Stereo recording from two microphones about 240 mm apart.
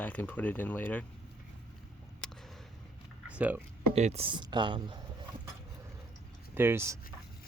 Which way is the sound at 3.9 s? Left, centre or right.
Right.